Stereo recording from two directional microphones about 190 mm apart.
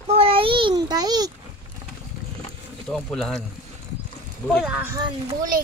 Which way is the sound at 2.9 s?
Centre (ahead or behind).